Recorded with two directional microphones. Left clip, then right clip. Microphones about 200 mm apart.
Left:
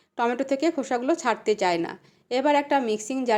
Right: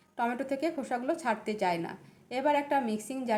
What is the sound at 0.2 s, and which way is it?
A woman's voice, 35° left (ahead or behind).